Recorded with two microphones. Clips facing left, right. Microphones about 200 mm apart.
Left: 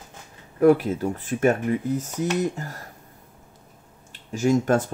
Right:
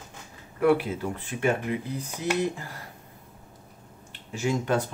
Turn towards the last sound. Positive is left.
turn(degrees=45)  # may be behind; listen again after turning